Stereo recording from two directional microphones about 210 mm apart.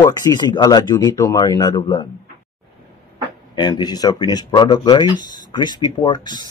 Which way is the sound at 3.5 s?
20° left (ahead or behind).